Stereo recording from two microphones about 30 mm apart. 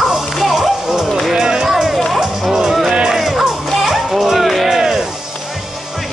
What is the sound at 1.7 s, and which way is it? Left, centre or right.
Music, centre.